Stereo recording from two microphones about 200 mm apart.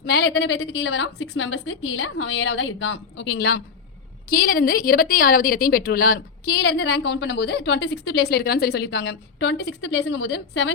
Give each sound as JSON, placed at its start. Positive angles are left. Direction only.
{"t": 0.0, "sound": "a woman's voice", "side_deg": 55}